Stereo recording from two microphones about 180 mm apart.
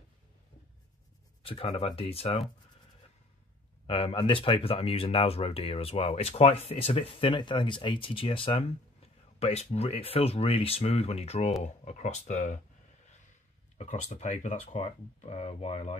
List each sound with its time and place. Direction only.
1.4 s speech: 30° left (ahead or behind)
3.8 s speech: 30° left (ahead or behind)
13.7 s speech: 40° left (ahead or behind)